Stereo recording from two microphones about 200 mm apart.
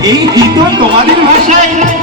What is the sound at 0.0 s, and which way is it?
Music, 20° right (ahead or behind).